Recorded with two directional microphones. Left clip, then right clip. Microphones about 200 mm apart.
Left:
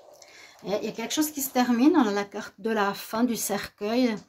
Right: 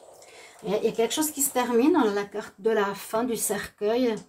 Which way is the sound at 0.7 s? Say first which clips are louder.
Right 5 dB; 50° left (ahead or behind).